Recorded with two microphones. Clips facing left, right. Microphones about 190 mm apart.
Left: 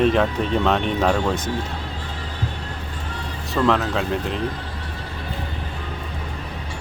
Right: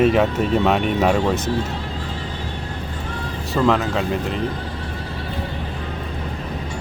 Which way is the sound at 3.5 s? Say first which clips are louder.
Right 1 dB; centre (ahead or behind).